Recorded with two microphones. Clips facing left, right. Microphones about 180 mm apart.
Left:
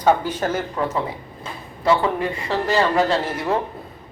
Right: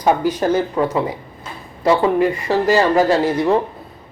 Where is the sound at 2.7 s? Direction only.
10° right (ahead or behind).